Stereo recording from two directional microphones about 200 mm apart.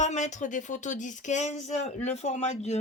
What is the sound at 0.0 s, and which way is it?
Speech, 35° left (ahead or behind).